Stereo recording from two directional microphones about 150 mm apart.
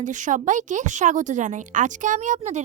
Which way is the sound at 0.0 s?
55° right (ahead or behind).